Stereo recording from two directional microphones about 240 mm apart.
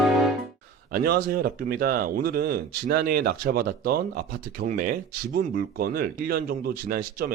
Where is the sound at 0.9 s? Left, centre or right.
Right.